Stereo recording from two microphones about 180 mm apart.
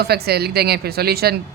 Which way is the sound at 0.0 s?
60° right (ahead or behind).